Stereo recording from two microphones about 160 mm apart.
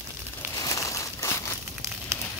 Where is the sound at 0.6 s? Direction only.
20° left (ahead or behind).